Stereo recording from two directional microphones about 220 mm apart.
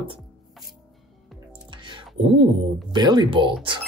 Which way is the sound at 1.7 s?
20° right (ahead or behind).